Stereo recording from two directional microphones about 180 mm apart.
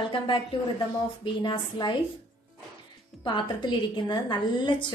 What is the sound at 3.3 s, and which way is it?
A woman's voice, 25° left (ahead or behind).